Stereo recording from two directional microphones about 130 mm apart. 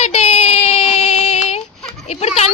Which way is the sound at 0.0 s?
55° left (ahead or behind).